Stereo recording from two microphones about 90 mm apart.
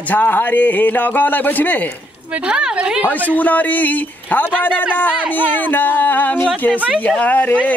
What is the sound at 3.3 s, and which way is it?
Speech, 20° left (ahead or behind).